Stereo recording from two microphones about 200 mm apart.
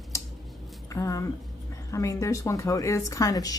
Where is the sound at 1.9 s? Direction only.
15° left (ahead or behind).